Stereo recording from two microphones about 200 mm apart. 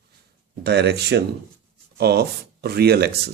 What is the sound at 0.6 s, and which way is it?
Speech, 55° right (ahead or behind).